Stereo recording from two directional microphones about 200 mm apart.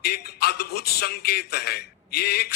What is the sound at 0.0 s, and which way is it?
A man's voice, 50° left (ahead or behind).